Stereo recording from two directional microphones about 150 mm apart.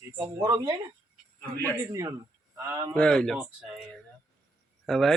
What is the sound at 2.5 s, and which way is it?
Speech, 20° right (ahead or behind).